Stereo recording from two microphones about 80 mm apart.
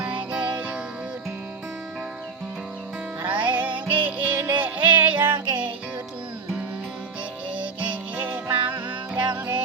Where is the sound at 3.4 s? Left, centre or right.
Centre.